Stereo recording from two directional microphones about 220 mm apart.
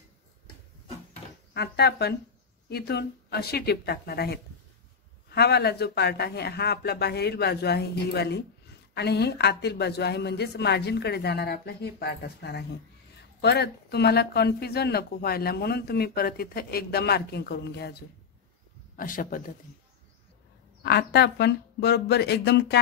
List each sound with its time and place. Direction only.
1.5 s a man's voice: 50° left (ahead or behind)
20.8 s speech: 45° left (ahead or behind)